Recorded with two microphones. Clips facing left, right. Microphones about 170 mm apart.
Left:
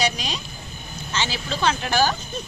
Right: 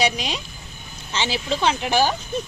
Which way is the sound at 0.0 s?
20° right (ahead or behind).